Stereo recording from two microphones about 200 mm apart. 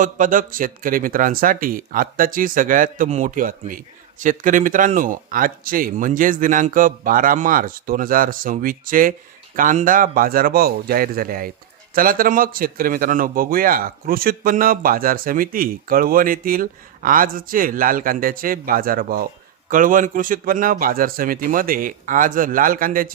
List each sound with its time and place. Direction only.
0.0 s speech: 40° right (ahead or behind)